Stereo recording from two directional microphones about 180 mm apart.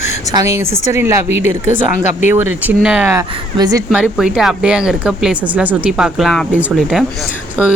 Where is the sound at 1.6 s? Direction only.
40° left (ahead or behind).